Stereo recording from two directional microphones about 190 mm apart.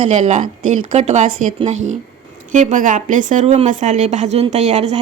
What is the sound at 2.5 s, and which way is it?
Speech, 40° right (ahead or behind).